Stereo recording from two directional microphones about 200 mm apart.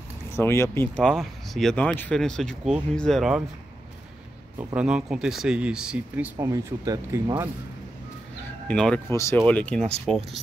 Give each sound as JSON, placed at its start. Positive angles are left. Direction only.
{"t": 0.3, "sound": "speech", "side_deg": 15}
{"t": 4.6, "sound": "speech", "side_deg": -5}
{"t": 6.3, "sound": "speech", "side_deg": -20}
{"t": 8.6, "sound": "speech", "side_deg": 5}